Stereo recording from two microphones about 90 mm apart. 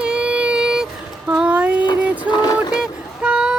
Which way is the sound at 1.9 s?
15° right (ahead or behind).